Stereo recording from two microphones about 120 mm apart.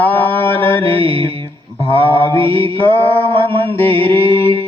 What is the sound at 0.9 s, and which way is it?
Mantra, 50° right (ahead or behind).